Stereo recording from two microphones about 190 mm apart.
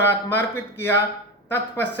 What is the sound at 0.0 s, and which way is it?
Speech, 10° left (ahead or behind).